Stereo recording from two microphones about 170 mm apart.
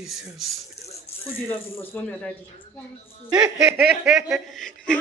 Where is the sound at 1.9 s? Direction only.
5° left (ahead or behind).